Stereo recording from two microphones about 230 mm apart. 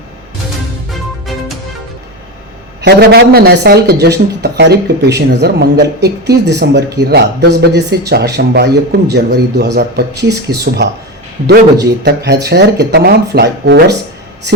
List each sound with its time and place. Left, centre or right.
2.8 s speech: right